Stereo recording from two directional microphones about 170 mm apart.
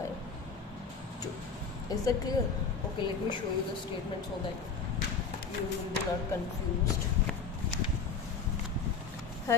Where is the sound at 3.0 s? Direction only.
30° left (ahead or behind).